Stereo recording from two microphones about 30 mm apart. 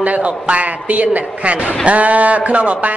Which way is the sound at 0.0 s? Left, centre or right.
Right.